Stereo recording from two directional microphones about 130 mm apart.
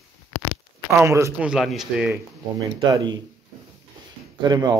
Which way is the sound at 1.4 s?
Centre (ahead or behind).